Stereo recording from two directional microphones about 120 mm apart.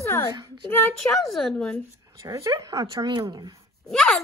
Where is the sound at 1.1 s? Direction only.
Centre (ahead or behind).